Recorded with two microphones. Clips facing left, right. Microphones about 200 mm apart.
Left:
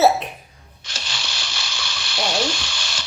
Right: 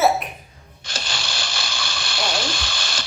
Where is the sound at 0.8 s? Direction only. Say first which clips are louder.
Right 3 dB; 50° right (ahead or behind).